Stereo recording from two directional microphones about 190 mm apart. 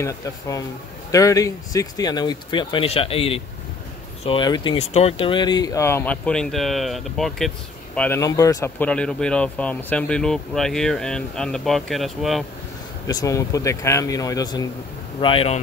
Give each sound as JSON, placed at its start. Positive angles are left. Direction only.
{"t": 0.0, "sound": "speech", "side_deg": 15}
{"t": 4.7, "sound": "speech", "side_deg": 35}
{"t": 8.2, "sound": "speech", "side_deg": 20}
{"t": 13.0, "sound": "speech", "side_deg": 15}